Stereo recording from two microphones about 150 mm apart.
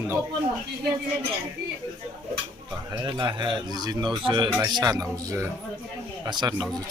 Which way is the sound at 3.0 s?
30° right (ahead or behind).